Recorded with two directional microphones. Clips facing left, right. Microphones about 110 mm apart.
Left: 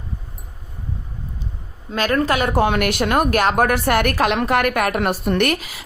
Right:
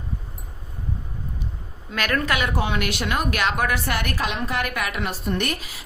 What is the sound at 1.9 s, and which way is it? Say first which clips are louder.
Speech: left 5 dB; 30° left (ahead or behind).